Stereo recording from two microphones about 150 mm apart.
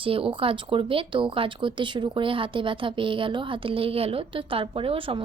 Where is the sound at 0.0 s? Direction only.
35° right (ahead or behind).